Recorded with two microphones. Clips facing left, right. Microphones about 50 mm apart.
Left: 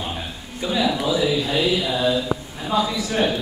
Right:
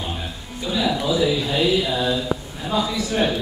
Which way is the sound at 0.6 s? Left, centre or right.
Centre.